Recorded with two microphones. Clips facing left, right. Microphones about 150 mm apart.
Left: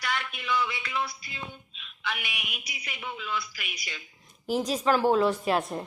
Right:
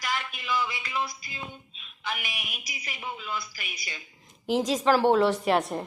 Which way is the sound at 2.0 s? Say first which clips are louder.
Even; 40° right (ahead or behind).